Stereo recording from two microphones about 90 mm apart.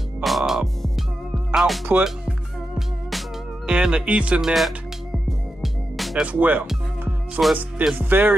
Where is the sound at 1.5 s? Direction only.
5° right (ahead or behind).